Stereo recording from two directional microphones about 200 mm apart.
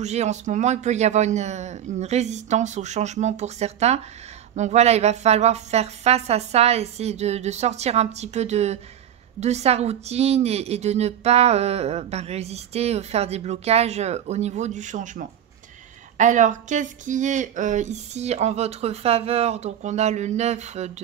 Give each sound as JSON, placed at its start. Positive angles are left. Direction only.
{"t": 0.0, "sound": "a woman's voice", "side_deg": -35}